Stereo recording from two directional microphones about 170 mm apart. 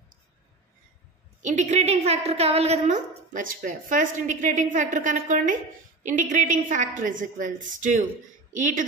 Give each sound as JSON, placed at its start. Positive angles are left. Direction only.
{"t": 1.4, "sound": "a woman's voice", "side_deg": -45}